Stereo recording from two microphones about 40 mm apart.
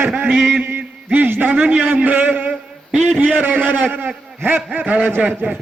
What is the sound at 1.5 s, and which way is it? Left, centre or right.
A man's voice, right.